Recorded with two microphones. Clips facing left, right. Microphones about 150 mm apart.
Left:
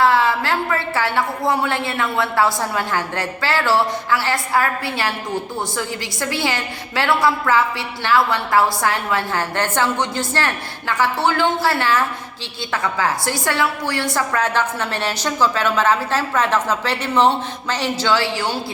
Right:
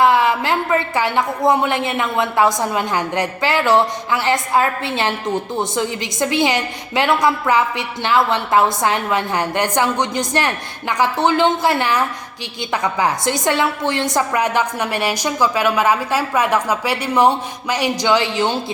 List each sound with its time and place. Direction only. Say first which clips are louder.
0.0 s a woman's voice: right 2 dB; 15° right (ahead or behind)